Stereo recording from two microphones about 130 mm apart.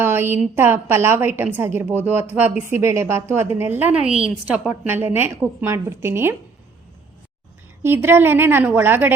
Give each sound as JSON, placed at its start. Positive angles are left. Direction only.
{"t": 0.0, "sound": "a woman's voice", "side_deg": -15}
{"t": 7.8, "sound": "a woman's voice", "side_deg": -15}